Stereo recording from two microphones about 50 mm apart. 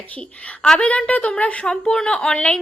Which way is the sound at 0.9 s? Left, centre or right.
Left.